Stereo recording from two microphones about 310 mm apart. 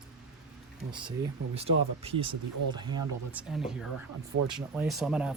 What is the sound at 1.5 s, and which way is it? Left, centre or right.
Speech, centre.